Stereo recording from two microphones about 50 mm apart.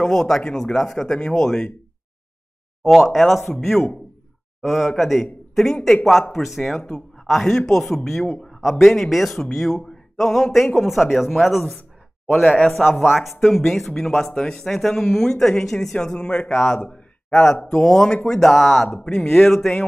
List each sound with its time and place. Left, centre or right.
0.0 s speech: centre
2.8 s a man's voice: centre
12.3 s speech: left
12.6 s a man's voice: centre
16.2 s a man's voice: left; by 19.8 s centre